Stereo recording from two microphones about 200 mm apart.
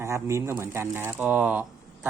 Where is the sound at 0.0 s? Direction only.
15° right (ahead or behind).